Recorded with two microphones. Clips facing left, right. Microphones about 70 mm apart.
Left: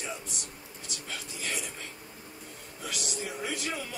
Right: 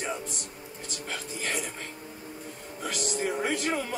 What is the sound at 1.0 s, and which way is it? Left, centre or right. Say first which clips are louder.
Speech: right 4 dB; right.